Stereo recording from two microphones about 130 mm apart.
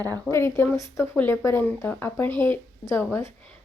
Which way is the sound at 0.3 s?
20° left (ahead or behind).